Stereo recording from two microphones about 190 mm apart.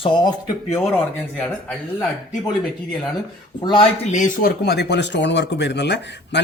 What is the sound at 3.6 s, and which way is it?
Speech, 25° left (ahead or behind).